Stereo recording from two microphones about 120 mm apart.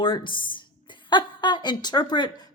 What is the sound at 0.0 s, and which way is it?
A woman's voice, 45° left (ahead or behind).